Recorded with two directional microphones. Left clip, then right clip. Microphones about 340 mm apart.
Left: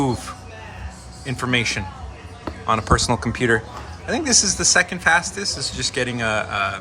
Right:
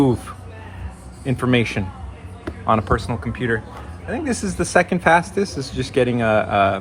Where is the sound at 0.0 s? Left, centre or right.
Centre.